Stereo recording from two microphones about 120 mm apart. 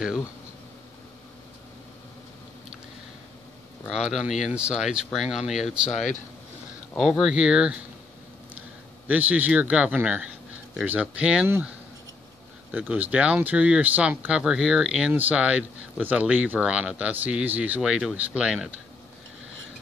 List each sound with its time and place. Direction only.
3.9 s speech: 5° right (ahead or behind)
5.9 s speech: 80° left
7.0 s speech: centre (ahead or behind)
9.0 s speech: 15° right (ahead or behind)
12.7 s speech: 10° right (ahead or behind)